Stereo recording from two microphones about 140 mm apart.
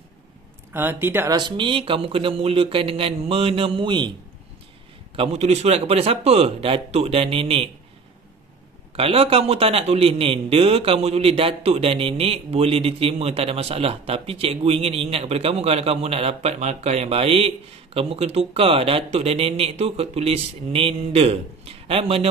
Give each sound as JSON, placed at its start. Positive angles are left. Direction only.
{"t": 0.7, "sound": "speech", "side_deg": -15}
{"t": 1.3, "sound": "speech", "side_deg": -35}
{"t": 5.1, "sound": "a man's voice", "side_deg": -45}
{"t": 8.9, "sound": "a man's voice", "side_deg": -45}